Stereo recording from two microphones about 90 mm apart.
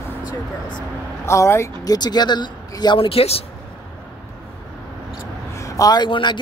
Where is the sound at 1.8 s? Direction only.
45° left (ahead or behind).